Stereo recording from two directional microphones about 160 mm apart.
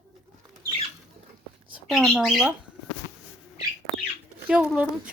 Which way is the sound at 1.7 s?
Centre (ahead or behind).